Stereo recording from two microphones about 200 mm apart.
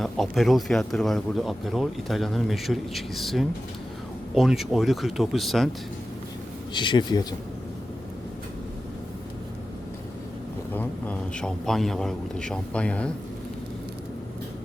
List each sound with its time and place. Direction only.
0.0 s speech: centre (ahead or behind)
6.7 s speech: 25° left (ahead or behind)
10.8 s speech: 10° left (ahead or behind)